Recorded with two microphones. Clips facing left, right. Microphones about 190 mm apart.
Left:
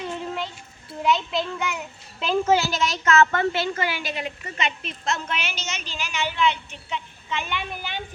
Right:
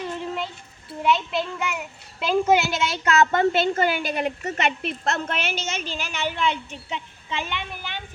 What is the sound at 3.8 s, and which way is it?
A woman's voice, 55° right (ahead or behind).